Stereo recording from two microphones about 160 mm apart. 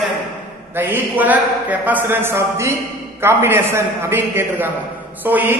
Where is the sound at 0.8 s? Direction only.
10° right (ahead or behind).